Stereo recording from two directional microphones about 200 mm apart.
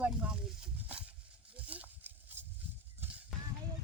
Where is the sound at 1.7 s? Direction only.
10° right (ahead or behind).